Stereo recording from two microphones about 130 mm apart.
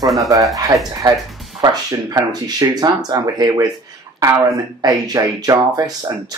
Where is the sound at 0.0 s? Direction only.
Centre (ahead or behind).